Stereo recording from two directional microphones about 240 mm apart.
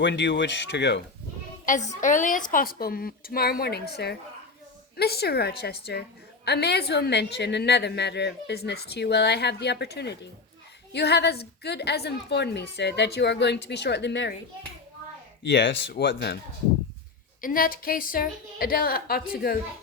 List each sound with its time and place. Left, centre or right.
0.0 s a woman's voice: left
1.6 s a woman's voice: left
15.4 s a woman's voice: left
17.4 s a woman's voice: left